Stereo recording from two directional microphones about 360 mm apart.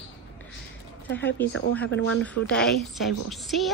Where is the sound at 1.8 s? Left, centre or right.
Left.